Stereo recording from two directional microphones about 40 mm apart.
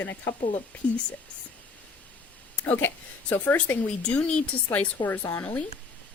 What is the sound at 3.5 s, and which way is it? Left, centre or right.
Speech, left.